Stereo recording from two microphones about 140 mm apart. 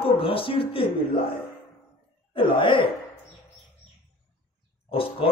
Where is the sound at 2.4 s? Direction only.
35° left (ahead or behind).